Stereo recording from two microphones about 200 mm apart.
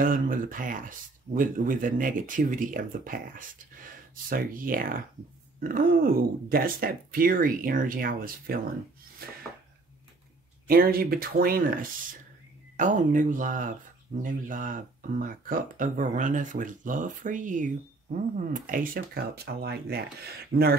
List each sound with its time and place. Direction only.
0.0 s speech: 45° right (ahead or behind)
10.7 s speech: 45° right (ahead or behind)
12.7 s speech: 40° right (ahead or behind)
20.5 s speech: 35° right (ahead or behind)